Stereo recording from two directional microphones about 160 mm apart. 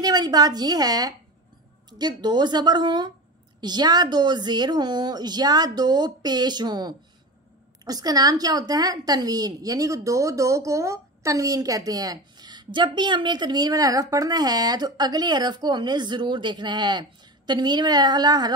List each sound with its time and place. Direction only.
0.0 s a woman's voice: 25° right (ahead or behind)